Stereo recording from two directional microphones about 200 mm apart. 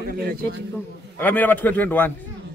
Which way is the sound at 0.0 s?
50° right (ahead or behind).